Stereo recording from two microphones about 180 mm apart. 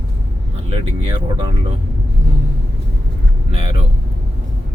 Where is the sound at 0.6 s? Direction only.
25° right (ahead or behind).